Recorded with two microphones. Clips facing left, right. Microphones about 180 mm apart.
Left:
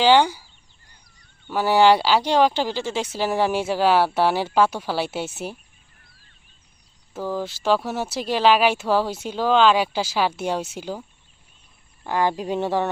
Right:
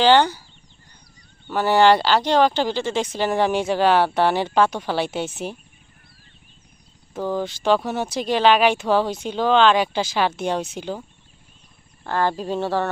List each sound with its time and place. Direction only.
0.0 s speech: 10° left (ahead or behind)
1.5 s speech: 10° left (ahead or behind)
7.1 s speech: 5° left (ahead or behind)
12.0 s speech: 15° left (ahead or behind)